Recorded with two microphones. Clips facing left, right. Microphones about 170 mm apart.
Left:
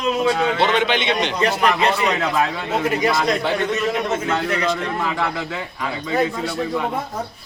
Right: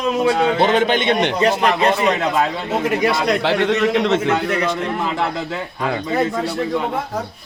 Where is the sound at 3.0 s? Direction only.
65° right (ahead or behind); by 4.2 s 80° right.